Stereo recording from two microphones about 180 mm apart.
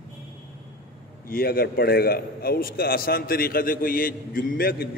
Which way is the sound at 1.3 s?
55° left (ahead or behind).